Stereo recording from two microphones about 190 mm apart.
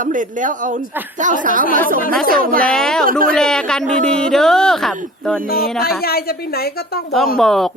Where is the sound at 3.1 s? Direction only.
45° right (ahead or behind).